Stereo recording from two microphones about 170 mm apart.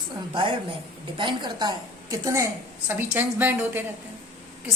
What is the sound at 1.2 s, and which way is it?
A woman's voice, 30° right (ahead or behind).